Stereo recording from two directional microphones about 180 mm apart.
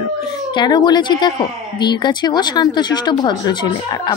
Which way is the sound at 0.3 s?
25° left (ahead or behind).